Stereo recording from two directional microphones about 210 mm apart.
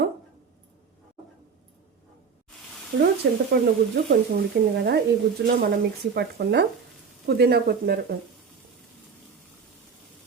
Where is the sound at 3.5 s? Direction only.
50° right (ahead or behind).